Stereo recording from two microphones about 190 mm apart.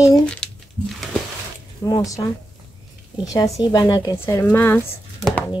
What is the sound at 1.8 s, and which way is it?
Speech, 20° left (ahead or behind).